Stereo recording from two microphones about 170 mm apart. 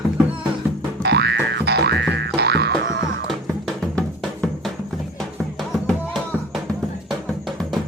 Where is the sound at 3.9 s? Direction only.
5° left (ahead or behind).